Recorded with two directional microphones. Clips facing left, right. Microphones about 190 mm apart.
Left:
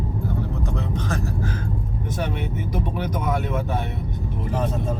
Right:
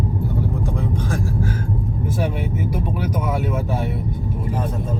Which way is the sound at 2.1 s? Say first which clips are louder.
Right 2 dB; 10° right (ahead or behind).